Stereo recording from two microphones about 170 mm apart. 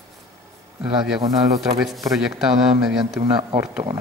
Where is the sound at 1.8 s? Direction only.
Centre (ahead or behind).